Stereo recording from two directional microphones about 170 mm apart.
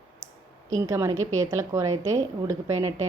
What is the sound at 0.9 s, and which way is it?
A woman's voice, 20° right (ahead or behind).